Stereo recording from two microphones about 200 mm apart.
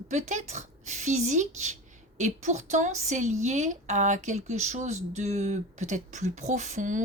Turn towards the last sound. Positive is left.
turn(degrees=-40)  # may be behind; listen again after turning